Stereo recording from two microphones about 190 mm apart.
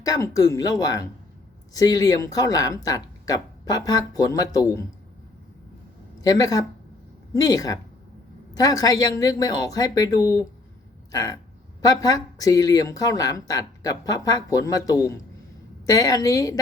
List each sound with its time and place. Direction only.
0.0 s speech: 20° left (ahead or behind)
6.2 s speech: 20° left (ahead or behind)